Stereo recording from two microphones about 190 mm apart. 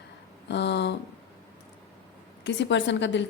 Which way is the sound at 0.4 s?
65° left (ahead or behind).